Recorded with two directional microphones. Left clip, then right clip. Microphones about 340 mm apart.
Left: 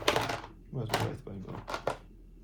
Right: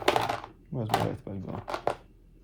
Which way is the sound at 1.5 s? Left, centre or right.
Centre.